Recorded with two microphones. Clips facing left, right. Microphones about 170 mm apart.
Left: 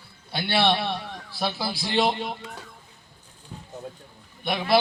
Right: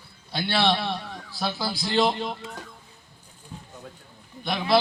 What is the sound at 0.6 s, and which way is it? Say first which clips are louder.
Speech: left 1 dB; 5° left (ahead or behind).